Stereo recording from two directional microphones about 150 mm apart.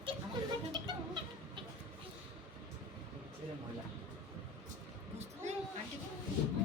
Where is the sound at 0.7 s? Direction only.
30° right (ahead or behind).